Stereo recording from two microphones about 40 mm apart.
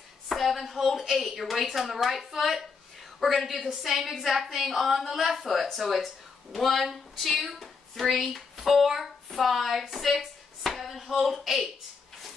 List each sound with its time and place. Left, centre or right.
0.3 s a woman's voice: centre